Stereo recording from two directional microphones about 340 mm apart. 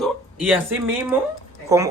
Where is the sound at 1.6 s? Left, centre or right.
Centre.